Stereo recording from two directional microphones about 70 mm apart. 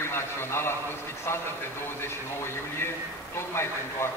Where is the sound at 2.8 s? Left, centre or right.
Left.